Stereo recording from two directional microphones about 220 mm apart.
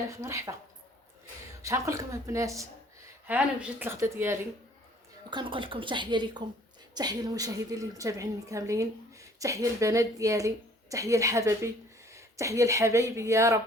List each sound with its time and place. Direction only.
0.1 s a woman's voice: 15° right (ahead or behind)
1.6 s a woman's voice: 15° right (ahead or behind)
5.3 s a woman's voice: 20° right (ahead or behind)